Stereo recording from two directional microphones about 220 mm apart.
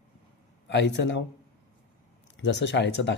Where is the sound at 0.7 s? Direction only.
50° left (ahead or behind).